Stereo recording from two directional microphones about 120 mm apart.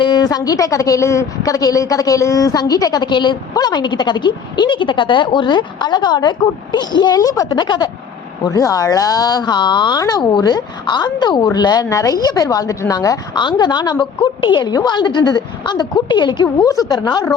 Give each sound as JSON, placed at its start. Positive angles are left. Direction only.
{"t": 0.0, "sound": "a woman's voice", "side_deg": 35}